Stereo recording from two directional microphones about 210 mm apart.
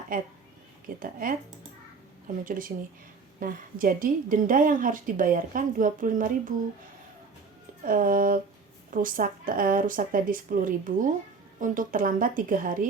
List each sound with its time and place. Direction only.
0.1 s a woman's voice: 40° right (ahead or behind)
7.9 s a woman's voice: 40° right (ahead or behind)